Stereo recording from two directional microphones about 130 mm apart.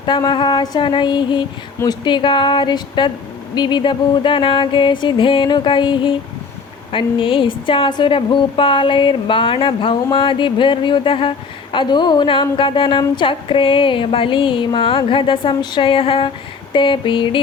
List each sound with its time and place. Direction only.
0.0 s a woman's voice: 35° left (ahead or behind)